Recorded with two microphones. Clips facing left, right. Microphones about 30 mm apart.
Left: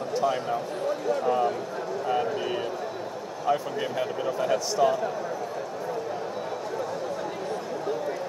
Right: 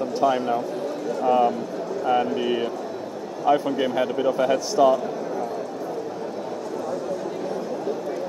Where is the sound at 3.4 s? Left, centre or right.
Centre.